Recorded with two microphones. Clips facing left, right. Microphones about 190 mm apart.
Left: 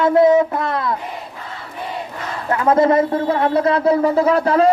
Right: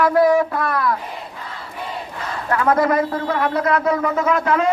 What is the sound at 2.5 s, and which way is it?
A man's voice, 25° left (ahead or behind).